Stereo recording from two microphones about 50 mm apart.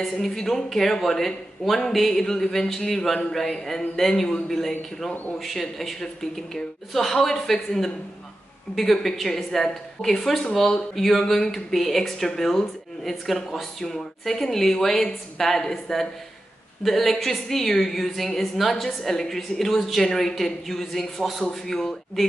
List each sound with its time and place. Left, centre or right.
0.0 s a woman's voice: centre
21.6 s speech: centre